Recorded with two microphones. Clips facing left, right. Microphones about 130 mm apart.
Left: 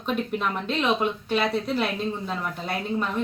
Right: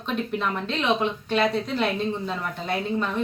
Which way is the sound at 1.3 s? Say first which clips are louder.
Right 2 dB; 5° left (ahead or behind).